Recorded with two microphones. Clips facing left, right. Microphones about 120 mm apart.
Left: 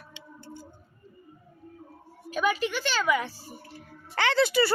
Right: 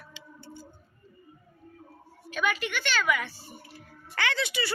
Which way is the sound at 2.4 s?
30° left (ahead or behind).